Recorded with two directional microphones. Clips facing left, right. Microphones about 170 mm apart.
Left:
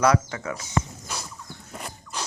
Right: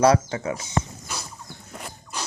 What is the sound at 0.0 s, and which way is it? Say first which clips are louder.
Speech: right 3 dB; 25° right (ahead or behind).